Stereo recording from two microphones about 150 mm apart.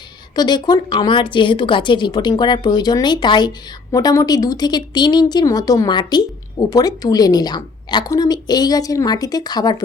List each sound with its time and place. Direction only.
0.3 s speech: 30° left (ahead or behind)